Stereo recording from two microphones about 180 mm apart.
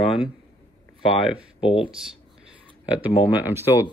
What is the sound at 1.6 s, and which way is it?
Speech, 30° left (ahead or behind).